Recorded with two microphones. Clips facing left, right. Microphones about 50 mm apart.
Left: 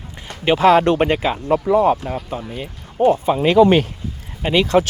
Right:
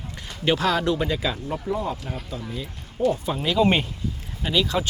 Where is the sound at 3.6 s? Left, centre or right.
Left.